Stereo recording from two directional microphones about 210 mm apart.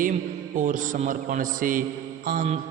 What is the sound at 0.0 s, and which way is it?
A man's voice, 35° right (ahead or behind).